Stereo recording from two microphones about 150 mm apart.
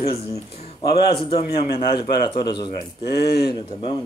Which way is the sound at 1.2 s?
35° left (ahead or behind).